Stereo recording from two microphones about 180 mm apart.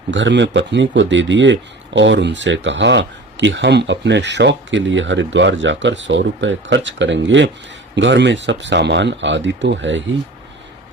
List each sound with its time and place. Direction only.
0.1 s speech: 90° right
7.9 s speech: 75° right (ahead or behind)